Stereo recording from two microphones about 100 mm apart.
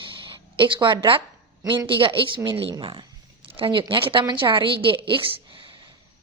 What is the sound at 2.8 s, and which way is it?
A woman's voice, 60° right (ahead or behind).